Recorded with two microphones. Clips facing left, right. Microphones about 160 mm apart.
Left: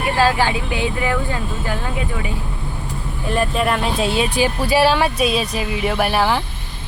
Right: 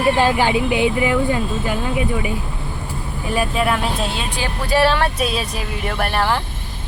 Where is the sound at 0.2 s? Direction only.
15° right (ahead or behind).